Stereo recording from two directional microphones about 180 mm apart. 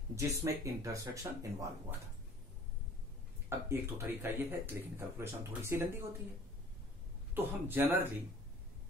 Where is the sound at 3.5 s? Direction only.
15° right (ahead or behind).